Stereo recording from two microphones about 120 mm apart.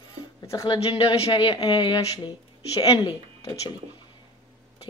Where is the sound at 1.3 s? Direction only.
40° left (ahead or behind).